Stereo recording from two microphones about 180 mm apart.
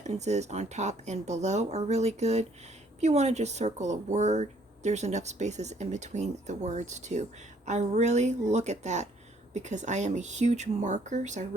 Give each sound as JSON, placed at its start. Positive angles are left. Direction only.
{"t": 0.0, "sound": "speech", "side_deg": -40}